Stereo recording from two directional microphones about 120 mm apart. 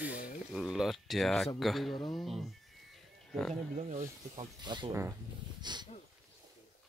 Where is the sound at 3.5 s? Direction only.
70° right (ahead or behind).